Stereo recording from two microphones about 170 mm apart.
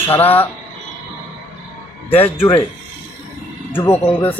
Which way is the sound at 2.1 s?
35° left (ahead or behind).